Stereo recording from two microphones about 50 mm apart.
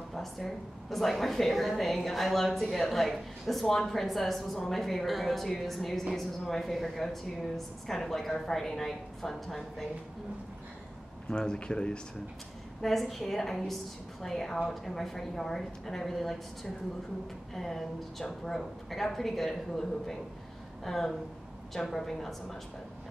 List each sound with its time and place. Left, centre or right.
0.1 s a woman's voice: centre
11.2 s a woman's voice: centre
12.8 s a woman's voice: centre